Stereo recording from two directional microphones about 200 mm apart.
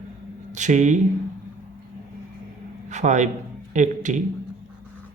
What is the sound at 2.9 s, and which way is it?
A man's voice, 35° right (ahead or behind).